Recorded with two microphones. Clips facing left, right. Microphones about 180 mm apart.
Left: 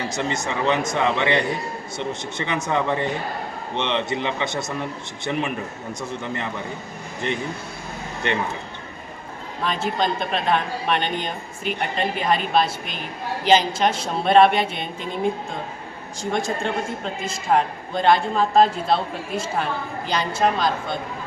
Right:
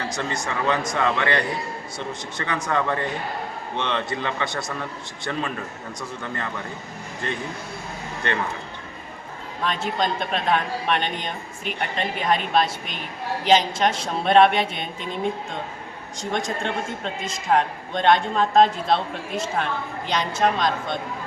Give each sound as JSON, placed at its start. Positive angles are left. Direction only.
{"t": 0.1, "sound": "a man's voice", "side_deg": 20}
{"t": 9.6, "sound": "speech", "side_deg": 5}
{"t": 17.5, "sound": "speech", "side_deg": 5}